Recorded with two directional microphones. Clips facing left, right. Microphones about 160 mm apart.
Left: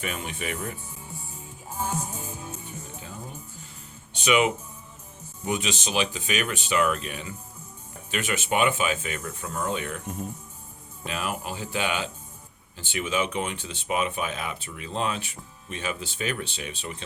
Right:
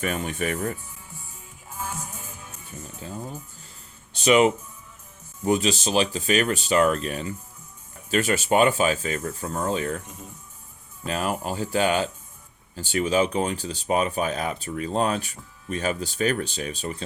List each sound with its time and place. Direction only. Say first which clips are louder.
0.0 s speech: right 6 dB; 45° right (ahead or behind)
1.7 s music: left 4 dB; 30° left (ahead or behind)
4.1 s speech: right 5 dB; 35° right (ahead or behind)
11.0 s speech: right 5 dB; 40° right (ahead or behind)